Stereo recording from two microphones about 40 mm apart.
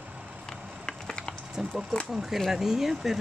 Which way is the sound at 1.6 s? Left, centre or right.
Centre.